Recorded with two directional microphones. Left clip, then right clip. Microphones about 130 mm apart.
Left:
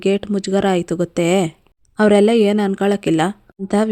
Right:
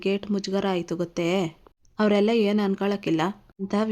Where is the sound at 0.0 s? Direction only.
35° left (ahead or behind).